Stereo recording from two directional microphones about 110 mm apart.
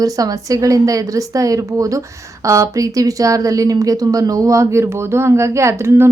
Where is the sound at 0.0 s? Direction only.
35° right (ahead or behind).